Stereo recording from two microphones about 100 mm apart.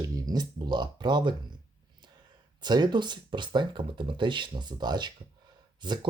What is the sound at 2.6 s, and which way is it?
Speech, 45° right (ahead or behind).